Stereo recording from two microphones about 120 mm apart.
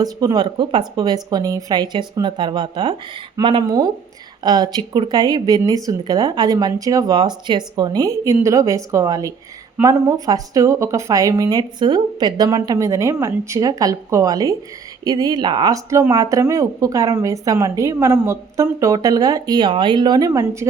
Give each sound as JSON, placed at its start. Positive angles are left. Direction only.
{"t": 0.0, "sound": "a woman's voice", "side_deg": -30}